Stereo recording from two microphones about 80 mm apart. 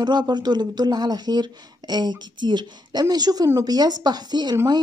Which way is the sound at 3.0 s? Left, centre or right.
Right.